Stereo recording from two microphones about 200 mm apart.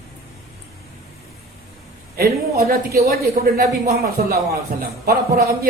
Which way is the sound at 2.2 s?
50° right (ahead or behind).